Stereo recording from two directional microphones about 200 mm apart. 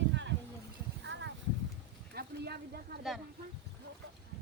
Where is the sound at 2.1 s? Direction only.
50° right (ahead or behind).